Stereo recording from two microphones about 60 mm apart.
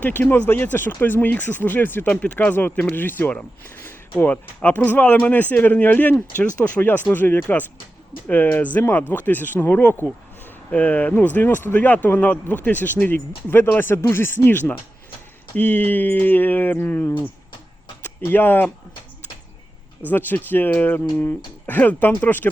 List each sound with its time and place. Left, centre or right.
0.0 s speech: left
2.0 s a man's voice: left
3.6 s a sound: left
4.3 s a man's voice: left
18.3 s speech: left
20.1 s speech: left